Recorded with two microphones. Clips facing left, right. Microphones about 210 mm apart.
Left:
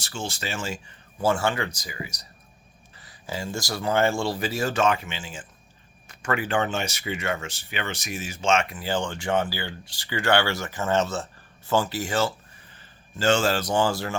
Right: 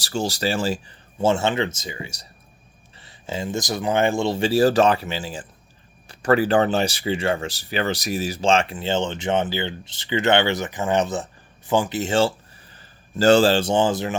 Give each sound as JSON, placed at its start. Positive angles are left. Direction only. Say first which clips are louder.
{"t": 0.0, "sound": "speech", "louder": "right 9 dB", "side_deg": -40}
{"t": 13.1, "sound": "speech", "louder": "right 7 dB", "side_deg": -35}